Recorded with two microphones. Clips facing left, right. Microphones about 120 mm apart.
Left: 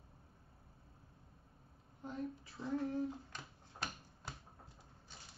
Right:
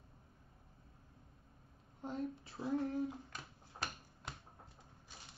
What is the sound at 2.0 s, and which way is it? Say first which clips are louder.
Speech: right 2 dB; 30° right (ahead or behind).